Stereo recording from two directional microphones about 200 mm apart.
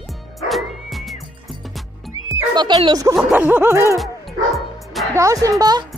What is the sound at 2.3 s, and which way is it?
Speech, 20° right (ahead or behind).